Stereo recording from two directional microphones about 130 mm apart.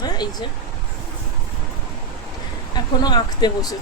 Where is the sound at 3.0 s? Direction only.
30° left (ahead or behind).